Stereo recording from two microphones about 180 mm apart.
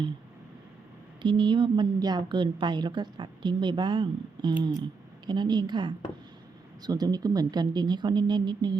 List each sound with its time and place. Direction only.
1.2 s a woman's voice: 25° right (ahead or behind)